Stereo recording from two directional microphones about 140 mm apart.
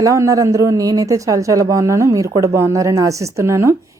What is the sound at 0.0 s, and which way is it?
A man's voice, 25° right (ahead or behind).